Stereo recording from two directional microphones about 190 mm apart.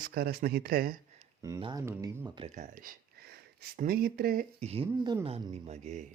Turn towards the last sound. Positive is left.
turn(degrees=-35)  # may be behind; listen again after turning